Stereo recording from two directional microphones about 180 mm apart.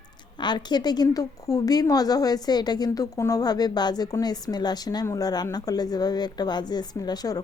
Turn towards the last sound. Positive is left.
turn(degrees=20)  # may be behind; listen again after turning